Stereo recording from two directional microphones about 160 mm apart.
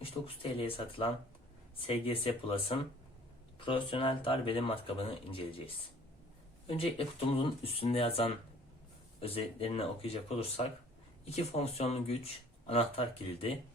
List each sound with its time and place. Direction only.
0.1 s speech: 25° left (ahead or behind)
6.7 s speech: 35° left (ahead or behind)